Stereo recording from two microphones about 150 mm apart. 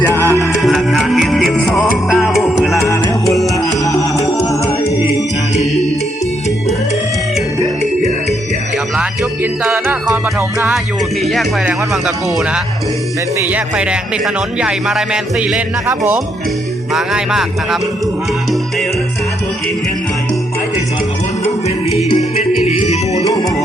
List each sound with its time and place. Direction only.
0.1 s music: 15° left (ahead or behind)
0.5 s music: centre (ahead or behind)
2.8 s music: 20° left (ahead or behind)
3.2 s music: centre (ahead or behind)
4.4 s music: 20° left (ahead or behind)
9.0 s music: 15° right (ahead or behind)
11.6 s music: 5° right (ahead or behind)
13.4 s speech: 10° right (ahead or behind)
16.9 s music: 5° right (ahead or behind)
22.6 s music: 45° left (ahead or behind)
23.2 s music: 25° left (ahead or behind)